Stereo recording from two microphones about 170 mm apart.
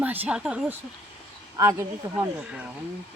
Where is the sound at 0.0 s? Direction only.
10° right (ahead or behind).